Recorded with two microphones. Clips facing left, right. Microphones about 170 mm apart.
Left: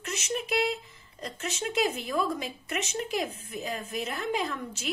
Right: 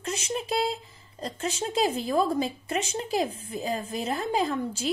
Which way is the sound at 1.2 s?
35° right (ahead or behind).